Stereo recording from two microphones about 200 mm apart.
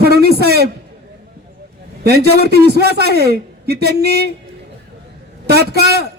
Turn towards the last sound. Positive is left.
turn(degrees=-55)  # may be behind; listen again after turning